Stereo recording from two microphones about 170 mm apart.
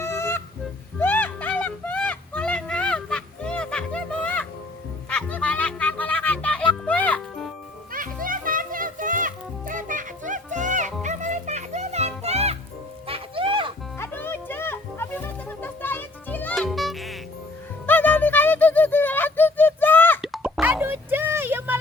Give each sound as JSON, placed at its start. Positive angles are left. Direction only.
{"t": 0.0, "sound": "music", "side_deg": 15}
{"t": 0.9, "sound": "a sound", "side_deg": 10}
{"t": 5.0, "sound": "music", "side_deg": 5}
{"t": 7.9, "sound": "music", "side_deg": -55}
{"t": 14.0, "sound": "music", "side_deg": 15}
{"t": 17.8, "sound": "music", "side_deg": 10}
{"t": 20.2, "sound": "plop", "side_deg": -5}